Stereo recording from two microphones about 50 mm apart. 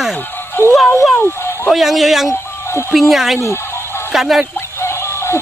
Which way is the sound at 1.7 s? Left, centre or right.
Centre.